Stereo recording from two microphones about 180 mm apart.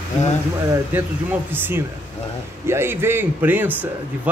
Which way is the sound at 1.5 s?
10° right (ahead or behind).